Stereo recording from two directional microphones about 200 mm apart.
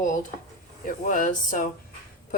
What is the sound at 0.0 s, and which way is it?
A woman's voice, 40° left (ahead or behind).